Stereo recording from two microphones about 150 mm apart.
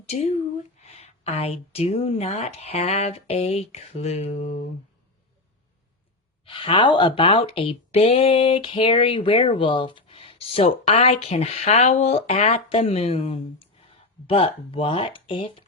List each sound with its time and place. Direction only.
0.1 s a woman's voice: 45° left (ahead or behind)
6.4 s speech: 35° left (ahead or behind)